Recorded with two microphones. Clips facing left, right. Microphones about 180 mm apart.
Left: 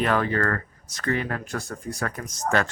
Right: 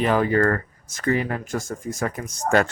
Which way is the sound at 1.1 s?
5° right (ahead or behind).